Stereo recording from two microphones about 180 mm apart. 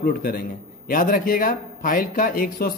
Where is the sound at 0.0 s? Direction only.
55° left (ahead or behind).